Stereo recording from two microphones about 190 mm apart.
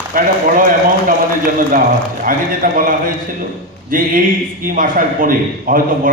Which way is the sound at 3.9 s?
45° right (ahead or behind).